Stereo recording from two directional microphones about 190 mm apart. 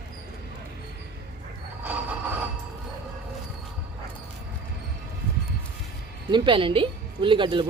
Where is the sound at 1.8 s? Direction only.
10° right (ahead or behind).